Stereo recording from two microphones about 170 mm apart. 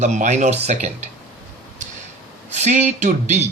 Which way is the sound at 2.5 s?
45° right (ahead or behind).